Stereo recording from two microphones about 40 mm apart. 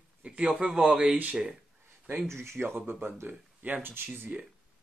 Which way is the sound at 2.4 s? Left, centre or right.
Right.